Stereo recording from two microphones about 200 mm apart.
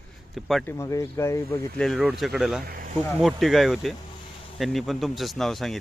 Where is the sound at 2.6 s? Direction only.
45° right (ahead or behind).